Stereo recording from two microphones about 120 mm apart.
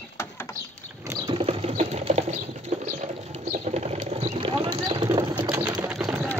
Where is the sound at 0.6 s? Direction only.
25° right (ahead or behind).